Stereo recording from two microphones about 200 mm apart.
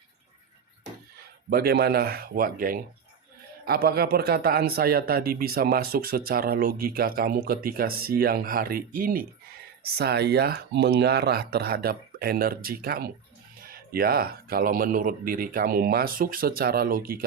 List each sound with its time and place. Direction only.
1.5 s a man's voice: 50° right (ahead or behind)